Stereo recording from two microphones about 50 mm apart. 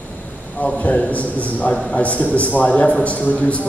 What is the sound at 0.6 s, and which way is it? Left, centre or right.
A man's voice, left.